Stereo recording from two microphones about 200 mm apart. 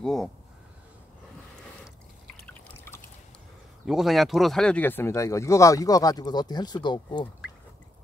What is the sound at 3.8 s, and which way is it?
Speech, centre (ahead or behind).